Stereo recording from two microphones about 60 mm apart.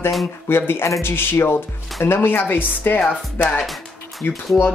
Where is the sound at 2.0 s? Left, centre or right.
Left.